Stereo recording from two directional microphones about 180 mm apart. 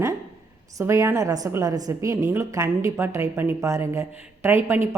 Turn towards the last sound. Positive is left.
turn(degrees=-15)  # may be behind; listen again after turning